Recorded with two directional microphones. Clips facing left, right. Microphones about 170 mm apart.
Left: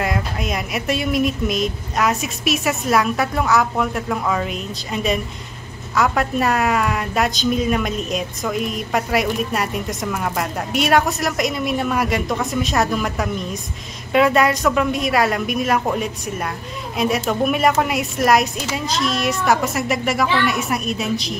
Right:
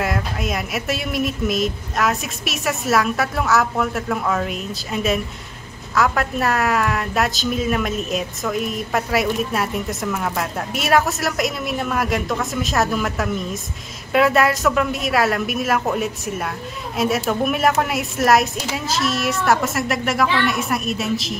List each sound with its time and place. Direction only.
0.0 s a woman's voice: centre (ahead or behind)